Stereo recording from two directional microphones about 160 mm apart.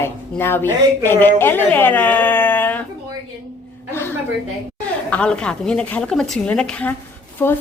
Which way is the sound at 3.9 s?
15° left (ahead or behind).